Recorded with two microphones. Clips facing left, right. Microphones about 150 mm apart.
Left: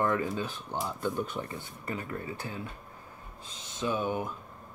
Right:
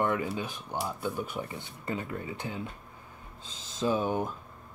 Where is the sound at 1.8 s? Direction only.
25° right (ahead or behind).